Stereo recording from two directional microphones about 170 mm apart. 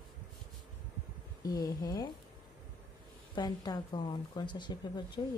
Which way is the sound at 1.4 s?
20° left (ahead or behind).